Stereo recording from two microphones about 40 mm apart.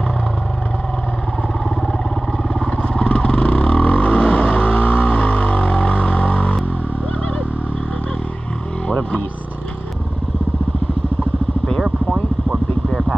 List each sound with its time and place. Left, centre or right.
2.6 s vehicle: left